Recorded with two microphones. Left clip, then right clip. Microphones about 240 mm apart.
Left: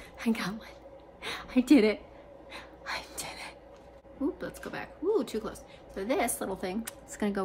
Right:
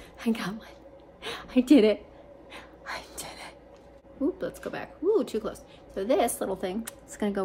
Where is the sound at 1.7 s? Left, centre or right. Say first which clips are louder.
Right 3 dB; centre.